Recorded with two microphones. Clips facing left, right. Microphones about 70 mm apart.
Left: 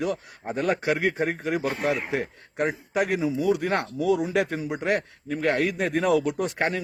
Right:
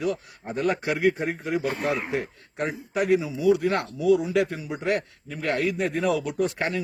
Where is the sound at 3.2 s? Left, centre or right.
Left.